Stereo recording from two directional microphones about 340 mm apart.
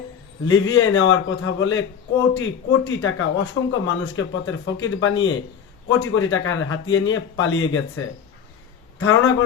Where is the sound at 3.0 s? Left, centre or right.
Left.